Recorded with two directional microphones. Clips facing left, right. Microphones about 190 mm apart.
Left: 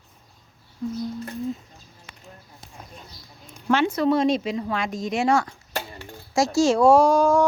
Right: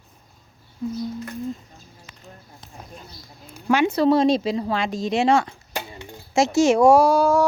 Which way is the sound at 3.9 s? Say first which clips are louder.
Right 3 dB; 35° right (ahead or behind).